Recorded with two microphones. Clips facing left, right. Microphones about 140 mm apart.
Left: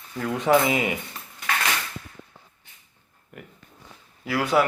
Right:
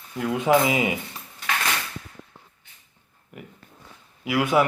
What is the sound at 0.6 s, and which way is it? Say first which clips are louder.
Speech: right 1 dB; 20° right (ahead or behind).